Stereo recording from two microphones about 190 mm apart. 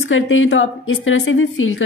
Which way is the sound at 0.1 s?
90° left.